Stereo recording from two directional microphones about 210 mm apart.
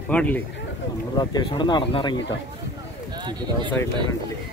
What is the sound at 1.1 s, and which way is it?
Speech, 20° left (ahead or behind).